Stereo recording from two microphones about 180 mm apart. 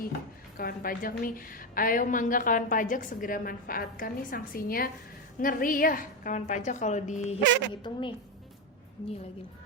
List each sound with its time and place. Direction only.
0.5 s a woman's voice: 55° left (ahead or behind)
7.7 s a woman's voice: 25° left (ahead or behind)